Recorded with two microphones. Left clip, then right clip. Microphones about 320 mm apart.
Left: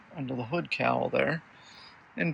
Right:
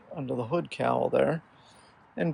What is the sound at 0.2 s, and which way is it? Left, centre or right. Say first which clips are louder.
Speech: right 3 dB; centre.